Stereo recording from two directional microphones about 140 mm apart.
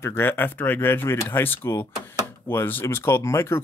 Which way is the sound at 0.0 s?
15° left (ahead or behind).